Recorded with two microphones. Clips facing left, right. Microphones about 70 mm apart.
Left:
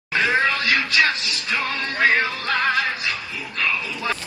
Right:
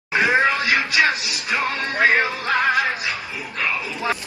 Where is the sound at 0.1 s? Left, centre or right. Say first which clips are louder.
Right 2 dB; right.